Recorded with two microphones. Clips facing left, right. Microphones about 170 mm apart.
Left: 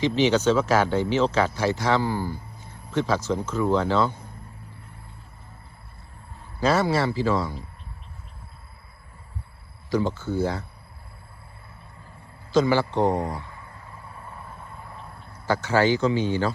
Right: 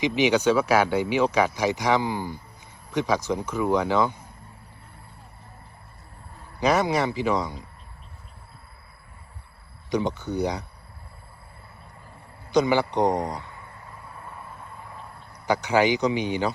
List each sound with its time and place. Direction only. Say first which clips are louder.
0.0 s speech: left 1 dB; 15° right (ahead or behind)
6.6 s speech: even; 15° right (ahead or behind)
9.9 s speech: left 1 dB; 20° right (ahead or behind)
12.5 s speech: even; 20° right (ahead or behind)
15.3 s speech: right 1 dB; 15° right (ahead or behind)